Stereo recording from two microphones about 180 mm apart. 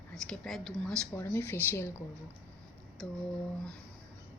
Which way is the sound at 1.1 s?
15° left (ahead or behind).